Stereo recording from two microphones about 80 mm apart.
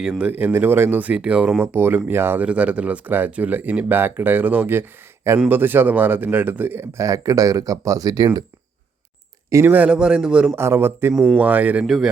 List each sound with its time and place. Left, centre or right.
0.0 s a man's voice: centre
0.3 s speech: right
1.6 s speech: right
6.9 s speech: right
9.5 s speech: right
9.7 s a man's voice: centre
10.5 s speech: right